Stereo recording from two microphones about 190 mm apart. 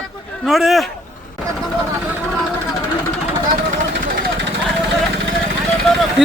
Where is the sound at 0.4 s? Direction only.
Centre (ahead or behind).